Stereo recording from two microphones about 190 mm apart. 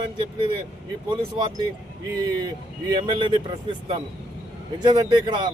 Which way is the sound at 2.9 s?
25° right (ahead or behind).